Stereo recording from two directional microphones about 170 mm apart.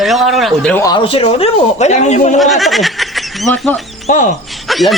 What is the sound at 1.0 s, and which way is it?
Speech, 35° left (ahead or behind).